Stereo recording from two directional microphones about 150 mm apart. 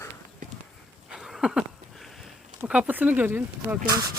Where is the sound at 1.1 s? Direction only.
Centre (ahead or behind).